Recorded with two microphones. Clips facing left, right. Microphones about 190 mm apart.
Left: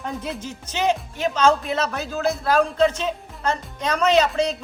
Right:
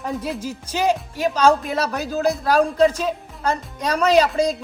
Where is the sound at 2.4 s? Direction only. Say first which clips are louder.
Right 2 dB; 15° right (ahead or behind).